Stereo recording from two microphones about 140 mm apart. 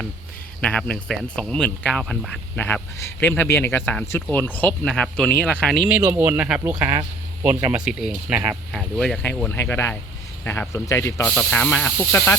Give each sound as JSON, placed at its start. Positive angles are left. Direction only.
{"t": 0.6, "sound": "speech", "side_deg": 10}
{"t": 5.9, "sound": "speech", "side_deg": -10}
{"t": 7.8, "sound": "speech", "side_deg": -5}